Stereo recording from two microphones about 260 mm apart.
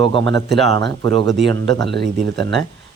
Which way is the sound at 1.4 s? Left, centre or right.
Right.